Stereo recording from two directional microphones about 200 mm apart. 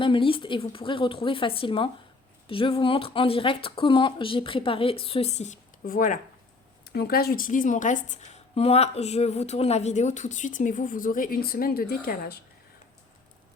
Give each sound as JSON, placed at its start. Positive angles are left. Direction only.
{"t": 0.0, "sound": "speech", "side_deg": 25}
{"t": 5.8, "sound": "a woman's voice", "side_deg": 45}